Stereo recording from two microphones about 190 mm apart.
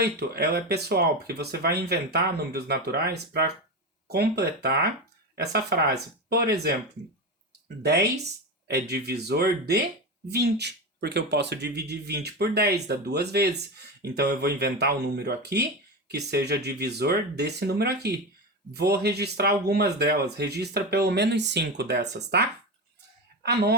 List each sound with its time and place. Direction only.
0.0 s speech: 55° right (ahead or behind)
7.8 s speech: 60° right (ahead or behind)